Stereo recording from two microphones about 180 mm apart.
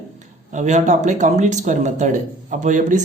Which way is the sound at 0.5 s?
40° right (ahead or behind).